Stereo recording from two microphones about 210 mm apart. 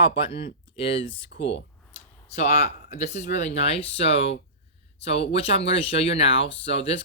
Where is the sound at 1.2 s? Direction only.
60° left (ahead or behind).